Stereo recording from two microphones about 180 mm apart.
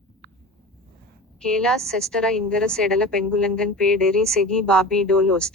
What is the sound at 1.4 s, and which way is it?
A woman's voice, 5° left (ahead or behind).